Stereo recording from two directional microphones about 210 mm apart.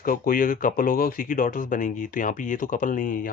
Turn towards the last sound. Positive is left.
turn(degrees=40)  # may be behind; listen again after turning